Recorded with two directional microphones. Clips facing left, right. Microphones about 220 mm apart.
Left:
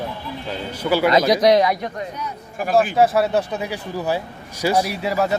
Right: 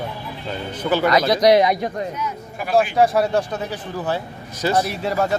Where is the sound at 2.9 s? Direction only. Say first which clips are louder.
Even; 5° left (ahead or behind).